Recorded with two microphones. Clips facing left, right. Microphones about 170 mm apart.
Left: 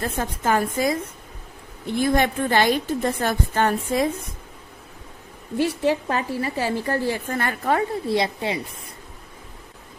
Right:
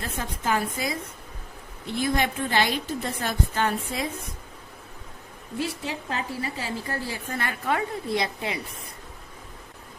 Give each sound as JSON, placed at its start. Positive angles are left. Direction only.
{"t": 0.0, "sound": "a woman's voice", "side_deg": 50}
{"t": 6.1, "sound": "a woman's voice", "side_deg": 55}